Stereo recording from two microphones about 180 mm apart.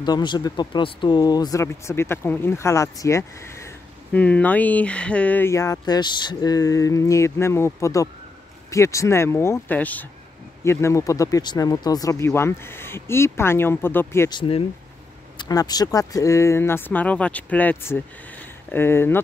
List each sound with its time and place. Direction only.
0.0 s speech: 25° left (ahead or behind)
15.3 s speech: 20° left (ahead or behind)